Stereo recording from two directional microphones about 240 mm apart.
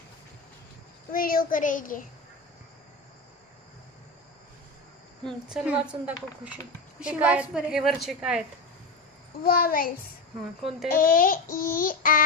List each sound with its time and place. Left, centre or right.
1.1 s child singing: left
5.2 s a woman's voice: centre
9.4 s child singing: left